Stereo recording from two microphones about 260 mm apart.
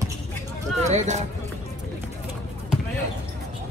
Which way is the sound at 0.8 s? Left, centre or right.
Right.